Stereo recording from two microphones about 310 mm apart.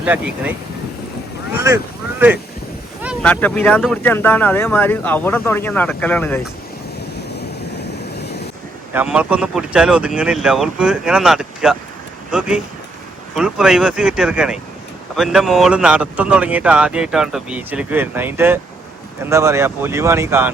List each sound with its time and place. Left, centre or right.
0.0 s speech: centre
1.6 s speech: centre
7.3 s vehicle: left
8.9 s speech: centre